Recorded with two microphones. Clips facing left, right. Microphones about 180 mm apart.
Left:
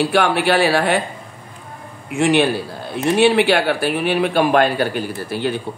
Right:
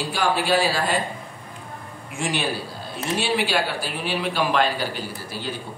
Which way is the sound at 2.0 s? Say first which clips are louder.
Left 11 dB; 65° left (ahead or behind).